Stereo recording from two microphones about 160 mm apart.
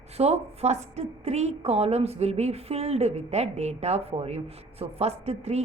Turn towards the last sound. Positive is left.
turn(degrees=-40)  # may be behind; listen again after turning